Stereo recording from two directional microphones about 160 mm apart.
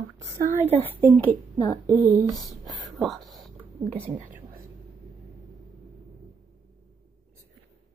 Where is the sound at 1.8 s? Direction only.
20° right (ahead or behind).